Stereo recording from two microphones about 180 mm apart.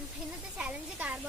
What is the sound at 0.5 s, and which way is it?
Speech, 5° right (ahead or behind).